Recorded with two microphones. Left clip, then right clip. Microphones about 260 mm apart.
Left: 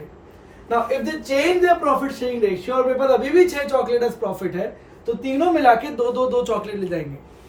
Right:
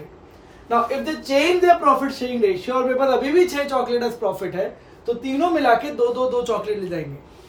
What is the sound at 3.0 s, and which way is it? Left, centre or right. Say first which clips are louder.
A man's voice: left 2 dB; centre.